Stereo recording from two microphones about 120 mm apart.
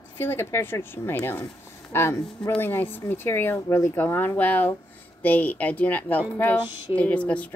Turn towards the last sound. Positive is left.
turn(degrees=10)  # may be behind; listen again after turning